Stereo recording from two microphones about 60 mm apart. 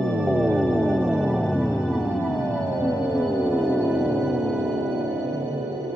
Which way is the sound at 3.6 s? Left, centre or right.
Centre.